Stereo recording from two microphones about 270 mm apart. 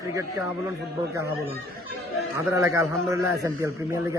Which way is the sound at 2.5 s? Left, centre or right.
Centre.